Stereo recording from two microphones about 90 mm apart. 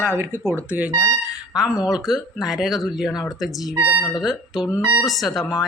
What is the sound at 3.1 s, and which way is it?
Speech, 45° left (ahead or behind).